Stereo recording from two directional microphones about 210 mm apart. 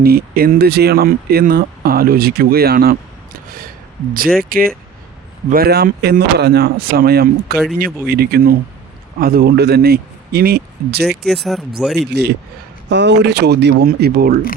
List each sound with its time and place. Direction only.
0.0 s speech: 45° right (ahead or behind)
4.4 s speech: 45° right (ahead or behind)
11.2 s speech: centre (ahead or behind)
11.9 s speech: 50° right (ahead or behind)